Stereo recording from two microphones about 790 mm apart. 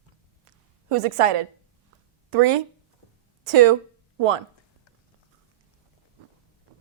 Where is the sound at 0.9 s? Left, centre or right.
Right.